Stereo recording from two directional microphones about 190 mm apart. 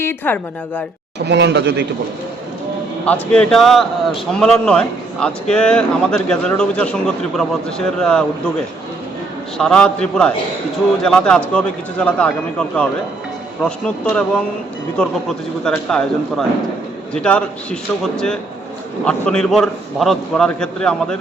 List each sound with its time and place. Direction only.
0.0 s a woman's voice: 10° left (ahead or behind)
1.2 s a man's voice: 65° right (ahead or behind)
3.1 s speech: 5° left (ahead or behind)
9.6 s speech: 5° left (ahead or behind)